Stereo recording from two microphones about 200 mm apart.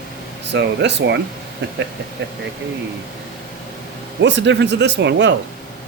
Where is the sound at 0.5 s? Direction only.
60° right (ahead or behind).